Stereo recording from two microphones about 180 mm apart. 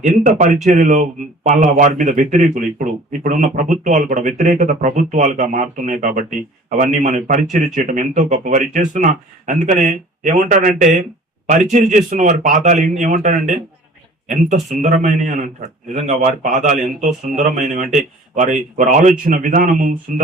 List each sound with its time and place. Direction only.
0.0 s a man's voice: 45° right (ahead or behind)